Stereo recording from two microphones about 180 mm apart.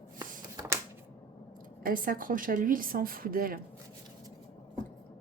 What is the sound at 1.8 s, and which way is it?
A woman's voice, 50° right (ahead or behind).